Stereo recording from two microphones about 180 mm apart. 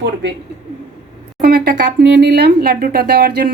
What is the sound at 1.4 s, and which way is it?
Speech, 60° right (ahead or behind).